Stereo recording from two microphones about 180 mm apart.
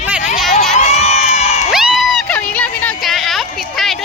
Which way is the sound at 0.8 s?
35° left (ahead or behind).